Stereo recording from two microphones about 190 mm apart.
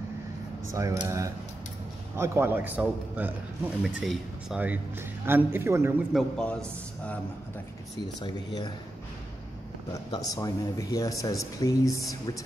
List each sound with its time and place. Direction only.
0.7 s a man's voice: 15° right (ahead or behind)
6.1 s speech: 5° left (ahead or behind)
10.1 s speech: 20° left (ahead or behind)